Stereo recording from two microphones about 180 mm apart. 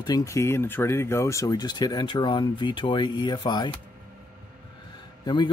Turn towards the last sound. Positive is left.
turn(degrees=25)  # may be behind; listen again after turning